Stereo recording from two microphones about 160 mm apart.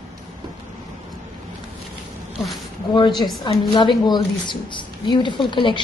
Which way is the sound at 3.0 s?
25° left (ahead or behind).